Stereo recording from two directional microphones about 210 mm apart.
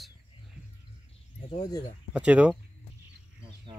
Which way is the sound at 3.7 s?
25° right (ahead or behind).